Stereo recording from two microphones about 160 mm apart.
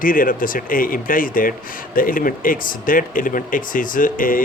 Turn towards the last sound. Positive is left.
turn(degrees=60)  # may be behind; listen again after turning